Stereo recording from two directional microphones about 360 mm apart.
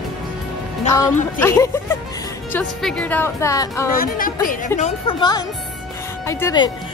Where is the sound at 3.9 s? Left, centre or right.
Left.